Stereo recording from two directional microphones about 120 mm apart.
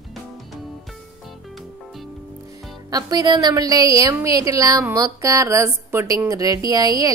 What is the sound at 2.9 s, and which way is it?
A woman's voice, 30° right (ahead or behind).